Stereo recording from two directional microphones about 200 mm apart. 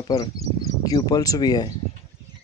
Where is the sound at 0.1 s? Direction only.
20° left (ahead or behind).